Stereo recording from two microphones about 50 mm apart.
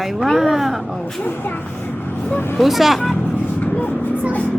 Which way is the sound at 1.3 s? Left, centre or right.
Left.